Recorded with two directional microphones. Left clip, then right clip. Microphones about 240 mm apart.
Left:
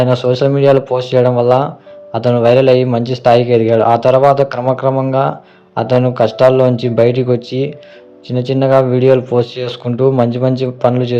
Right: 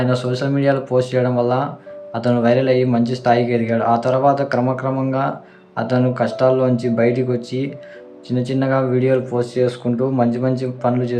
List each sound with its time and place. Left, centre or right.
0.0 s a man's voice: left